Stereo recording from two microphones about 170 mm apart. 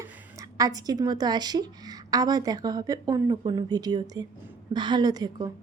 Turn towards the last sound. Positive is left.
turn(degrees=-25)  # may be behind; listen again after turning